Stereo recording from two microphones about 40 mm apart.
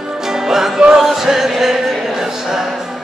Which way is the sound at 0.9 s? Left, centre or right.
Centre.